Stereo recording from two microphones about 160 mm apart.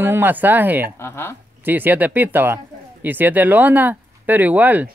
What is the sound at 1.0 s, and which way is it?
Speech, 15° left (ahead or behind).